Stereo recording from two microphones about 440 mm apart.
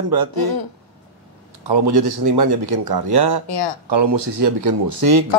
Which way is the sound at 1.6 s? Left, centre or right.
Right.